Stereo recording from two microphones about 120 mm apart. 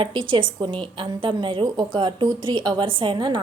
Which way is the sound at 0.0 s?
45° right (ahead or behind).